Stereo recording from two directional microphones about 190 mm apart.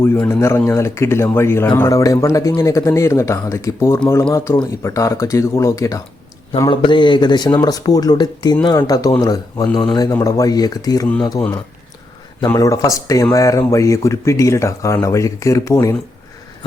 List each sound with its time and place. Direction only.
0.0 s speech: 15° left (ahead or behind)
12.5 s speech: 15° left (ahead or behind)